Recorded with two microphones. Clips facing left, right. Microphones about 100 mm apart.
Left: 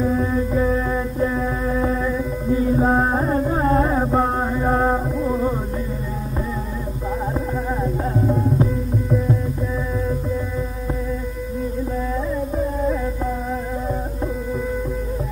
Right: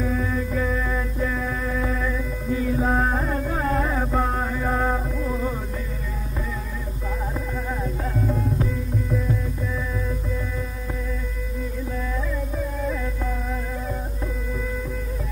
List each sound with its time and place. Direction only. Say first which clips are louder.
0.0 s music: left 5 dB; 25° left (ahead or behind)
7.8 s music: left 6 dB; 25° left (ahead or behind)